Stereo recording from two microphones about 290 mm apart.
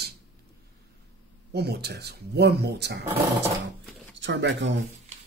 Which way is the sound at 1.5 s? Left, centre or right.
Right.